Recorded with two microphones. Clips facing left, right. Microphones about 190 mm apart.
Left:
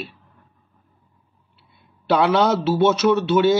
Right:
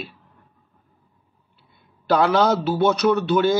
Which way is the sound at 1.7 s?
Centre (ahead or behind).